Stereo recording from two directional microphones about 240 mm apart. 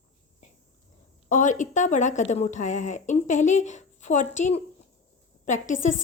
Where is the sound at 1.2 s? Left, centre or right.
Left.